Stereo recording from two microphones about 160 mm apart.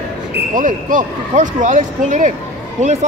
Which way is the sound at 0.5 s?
55° right (ahead or behind).